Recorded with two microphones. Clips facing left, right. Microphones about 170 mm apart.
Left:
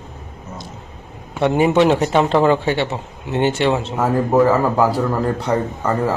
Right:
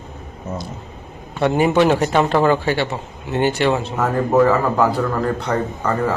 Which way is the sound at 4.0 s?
10° left (ahead or behind).